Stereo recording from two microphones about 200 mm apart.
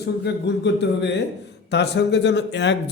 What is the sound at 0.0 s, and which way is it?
A man's voice, 60° left (ahead or behind).